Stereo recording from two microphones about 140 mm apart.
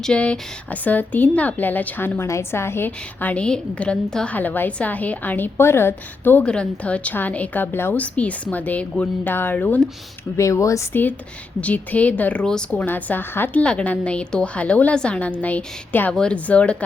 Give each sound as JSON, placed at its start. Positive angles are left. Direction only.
{"t": 0.0, "sound": "a woman's voice", "side_deg": 5}